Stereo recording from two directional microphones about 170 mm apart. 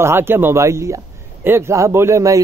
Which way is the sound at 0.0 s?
15° right (ahead or behind).